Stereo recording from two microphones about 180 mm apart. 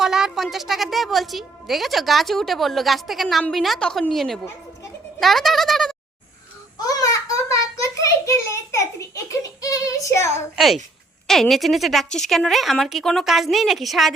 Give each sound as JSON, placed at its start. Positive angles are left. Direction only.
{"t": 0.0, "sound": "a woman's voice", "side_deg": -5}
{"t": 6.7, "sound": "child singing", "side_deg": 20}
{"t": 10.5, "sound": "a woman's voice", "side_deg": 0}